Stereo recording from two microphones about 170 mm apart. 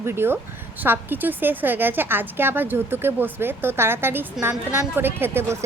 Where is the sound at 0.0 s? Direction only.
15° right (ahead or behind).